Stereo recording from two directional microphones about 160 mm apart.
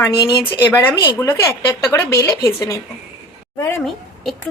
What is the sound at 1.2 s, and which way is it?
A woman's voice, 20° left (ahead or behind).